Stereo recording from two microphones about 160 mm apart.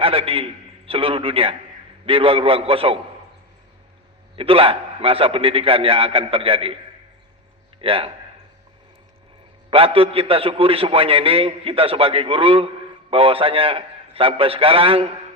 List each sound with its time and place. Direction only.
0.0 s a man's voice: 35° right (ahead or behind)
4.4 s a man's voice: 35° right (ahead or behind)
7.8 s a man's voice: 35° right (ahead or behind)
9.6 s a man's voice: 35° right (ahead or behind)